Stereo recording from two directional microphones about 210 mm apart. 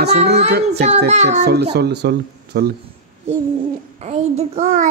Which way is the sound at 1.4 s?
50° right (ahead or behind).